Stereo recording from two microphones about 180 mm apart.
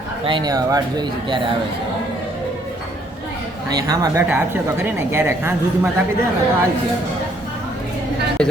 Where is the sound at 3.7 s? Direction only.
20° right (ahead or behind).